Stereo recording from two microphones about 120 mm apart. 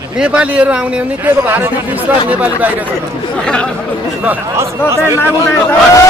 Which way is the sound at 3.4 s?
10° left (ahead or behind).